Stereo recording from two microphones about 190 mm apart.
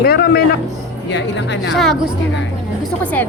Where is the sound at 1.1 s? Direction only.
70° left (ahead or behind).